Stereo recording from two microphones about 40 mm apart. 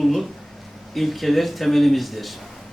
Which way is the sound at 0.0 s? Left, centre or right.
Centre.